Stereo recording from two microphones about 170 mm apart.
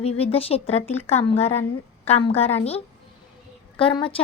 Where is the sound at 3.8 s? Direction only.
30° left (ahead or behind).